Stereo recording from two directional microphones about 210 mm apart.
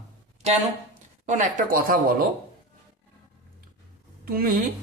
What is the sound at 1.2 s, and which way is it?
Speech, 35° right (ahead or behind).